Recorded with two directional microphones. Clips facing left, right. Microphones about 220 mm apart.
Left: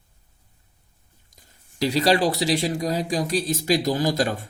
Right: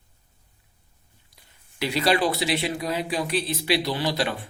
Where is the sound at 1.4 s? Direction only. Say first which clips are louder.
Left 5 dB; 40° left (ahead or behind).